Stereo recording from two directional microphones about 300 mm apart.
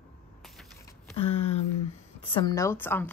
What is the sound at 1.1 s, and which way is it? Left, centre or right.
A woman's voice, left.